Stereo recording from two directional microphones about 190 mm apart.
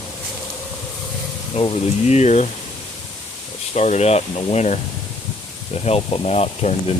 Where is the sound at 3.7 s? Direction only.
35° left (ahead or behind).